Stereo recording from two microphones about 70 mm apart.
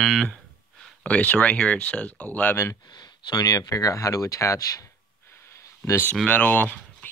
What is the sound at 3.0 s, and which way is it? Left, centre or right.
Speech, left.